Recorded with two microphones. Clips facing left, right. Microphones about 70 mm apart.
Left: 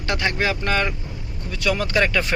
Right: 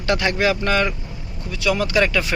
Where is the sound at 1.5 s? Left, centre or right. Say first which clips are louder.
Right 2 dB; left.